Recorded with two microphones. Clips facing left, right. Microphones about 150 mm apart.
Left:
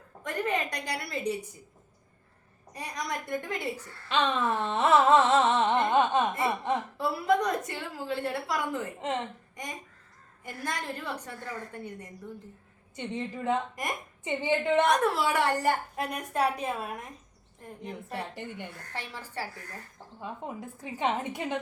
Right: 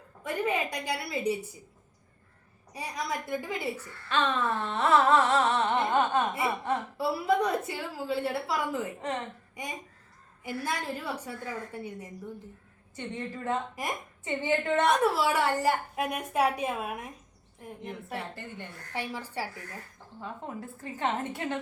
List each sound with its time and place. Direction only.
0.3 s a woman's voice: 10° right (ahead or behind)
2.7 s a woman's voice: 5° right (ahead or behind)
4.1 s music: 15° left (ahead or behind)
6.9 s a woman's voice: 10° right (ahead or behind)
9.0 s music: 20° left (ahead or behind)
10.4 s a woman's voice: 10° right (ahead or behind)
13.0 s a woman's voice: 20° left (ahead or behind)
15.0 s a woman's voice: 5° right (ahead or behind)
18.1 s a woman's voice: 15° left (ahead or behind)
18.9 s a woman's voice: 15° right (ahead or behind)
20.2 s a woman's voice: 15° left (ahead or behind)